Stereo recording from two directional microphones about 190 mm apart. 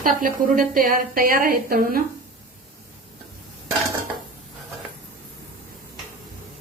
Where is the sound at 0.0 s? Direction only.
45° right (ahead or behind).